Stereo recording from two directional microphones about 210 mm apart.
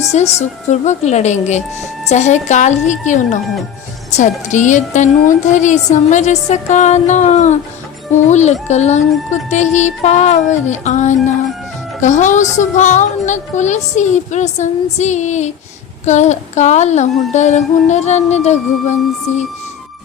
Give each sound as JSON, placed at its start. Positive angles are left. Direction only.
{"t": 0.1, "sound": "a woman's voice", "side_deg": 35}